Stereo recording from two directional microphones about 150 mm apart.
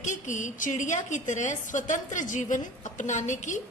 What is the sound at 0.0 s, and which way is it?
A woman's voice, 55° left (ahead or behind).